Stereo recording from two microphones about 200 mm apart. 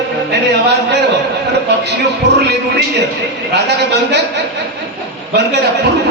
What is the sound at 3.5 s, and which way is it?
Speech, 55° right (ahead or behind).